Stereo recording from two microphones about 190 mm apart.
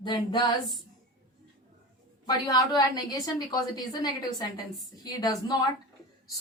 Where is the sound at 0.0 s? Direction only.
20° left (ahead or behind).